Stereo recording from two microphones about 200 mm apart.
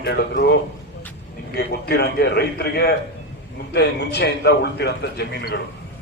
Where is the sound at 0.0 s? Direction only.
55° left (ahead or behind).